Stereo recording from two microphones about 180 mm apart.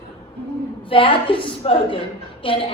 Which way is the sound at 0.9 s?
30° left (ahead or behind).